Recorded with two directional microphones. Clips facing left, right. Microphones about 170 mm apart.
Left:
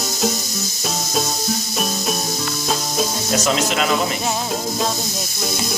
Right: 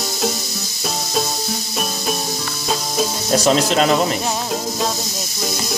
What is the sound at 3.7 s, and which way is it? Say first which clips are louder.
Speech: right 4 dB; 35° right (ahead or behind).